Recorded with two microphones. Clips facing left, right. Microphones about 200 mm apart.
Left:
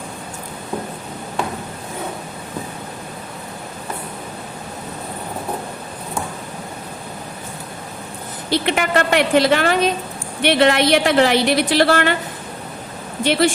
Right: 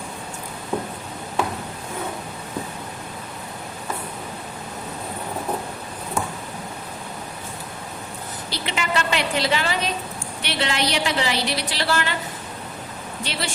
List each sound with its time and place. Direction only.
8.4 s a woman's voice: 55° left (ahead or behind)
13.2 s a woman's voice: 55° left (ahead or behind)